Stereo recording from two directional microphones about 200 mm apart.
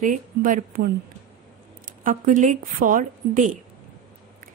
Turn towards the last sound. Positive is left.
turn(degrees=-45)  # may be behind; listen again after turning